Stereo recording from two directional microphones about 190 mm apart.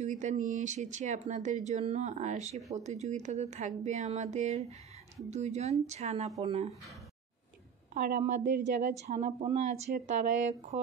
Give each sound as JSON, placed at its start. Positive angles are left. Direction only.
{"t": 0.0, "sound": "speech", "side_deg": -40}
{"t": 7.9, "sound": "a woman's voice", "side_deg": -40}